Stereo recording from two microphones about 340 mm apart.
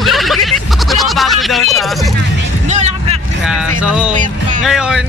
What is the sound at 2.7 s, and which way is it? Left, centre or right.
Vehicle, centre.